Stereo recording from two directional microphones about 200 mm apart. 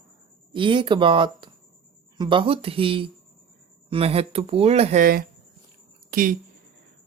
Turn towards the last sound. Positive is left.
turn(degrees=-45)  # may be behind; listen again after turning